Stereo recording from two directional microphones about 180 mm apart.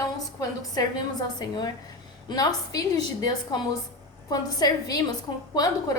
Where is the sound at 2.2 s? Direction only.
20° left (ahead or behind).